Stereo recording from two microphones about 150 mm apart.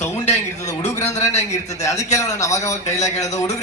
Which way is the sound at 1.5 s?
20° left (ahead or behind).